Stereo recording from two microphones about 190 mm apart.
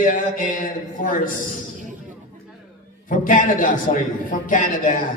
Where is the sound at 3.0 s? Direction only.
45° left (ahead or behind).